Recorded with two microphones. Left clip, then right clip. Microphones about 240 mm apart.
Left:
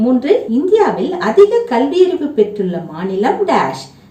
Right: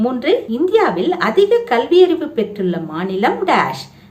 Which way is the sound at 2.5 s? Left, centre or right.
Right.